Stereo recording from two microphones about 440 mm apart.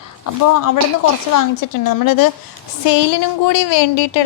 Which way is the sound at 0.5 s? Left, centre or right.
Left.